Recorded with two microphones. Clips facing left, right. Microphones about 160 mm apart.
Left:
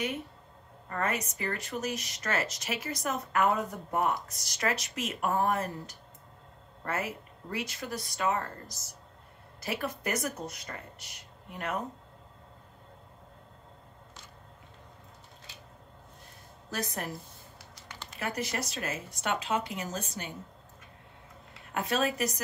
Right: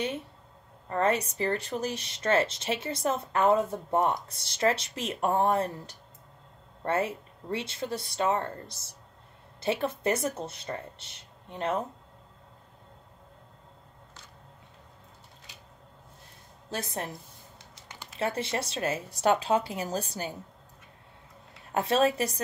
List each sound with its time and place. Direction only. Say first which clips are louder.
0.8 s speech: right 6 dB; 30° right (ahead or behind)
16.7 s speech: right 1 dB; 25° right (ahead or behind)
18.2 s speech: right 4 dB; 30° right (ahead or behind)
21.7 s speech: right 5 dB; 30° right (ahead or behind)